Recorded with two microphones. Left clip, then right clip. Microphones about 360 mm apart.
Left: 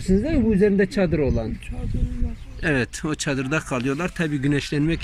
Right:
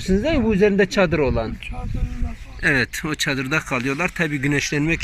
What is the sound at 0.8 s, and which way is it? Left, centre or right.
Speech, centre.